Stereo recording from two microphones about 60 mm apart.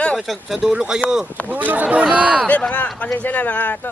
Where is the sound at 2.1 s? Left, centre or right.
Centre.